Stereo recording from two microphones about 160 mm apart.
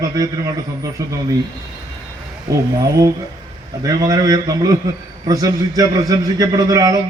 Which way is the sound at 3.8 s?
20° right (ahead or behind).